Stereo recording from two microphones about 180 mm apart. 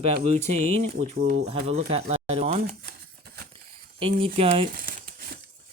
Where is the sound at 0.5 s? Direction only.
35° right (ahead or behind).